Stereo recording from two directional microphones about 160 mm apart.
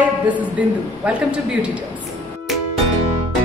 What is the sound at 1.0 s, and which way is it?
Speech, 5° right (ahead or behind).